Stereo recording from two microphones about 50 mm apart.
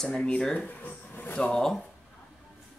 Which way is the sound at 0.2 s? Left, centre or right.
Left.